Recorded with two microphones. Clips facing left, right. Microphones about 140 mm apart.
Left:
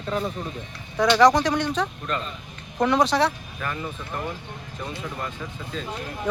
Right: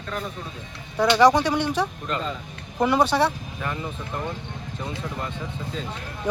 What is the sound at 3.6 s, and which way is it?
Speech, 20° right (ahead or behind).